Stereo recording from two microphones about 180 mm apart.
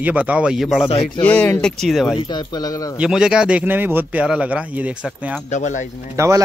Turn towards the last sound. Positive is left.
turn(degrees=-20)  # may be behind; listen again after turning